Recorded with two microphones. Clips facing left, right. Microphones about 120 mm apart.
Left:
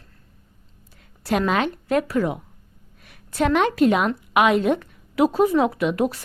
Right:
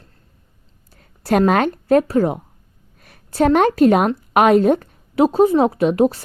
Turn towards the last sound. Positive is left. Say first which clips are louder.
# right 6 dB
turn(degrees=-35)  # may be behind; listen again after turning